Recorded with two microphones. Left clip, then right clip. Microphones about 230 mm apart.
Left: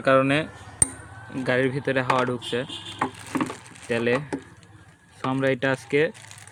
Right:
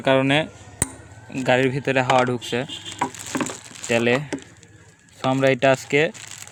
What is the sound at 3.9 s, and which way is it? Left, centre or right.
Speech, right.